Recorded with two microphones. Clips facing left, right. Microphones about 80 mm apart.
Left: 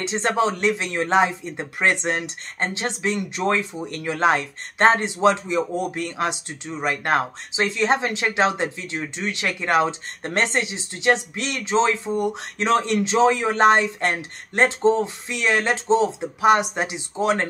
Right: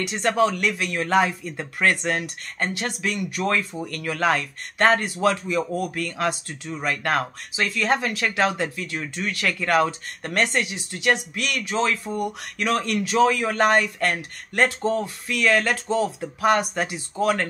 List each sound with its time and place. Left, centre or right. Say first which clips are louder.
0.0 s speech: even; left